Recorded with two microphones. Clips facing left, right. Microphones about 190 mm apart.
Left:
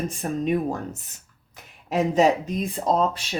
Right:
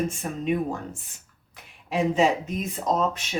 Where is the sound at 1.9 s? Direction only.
40° left (ahead or behind).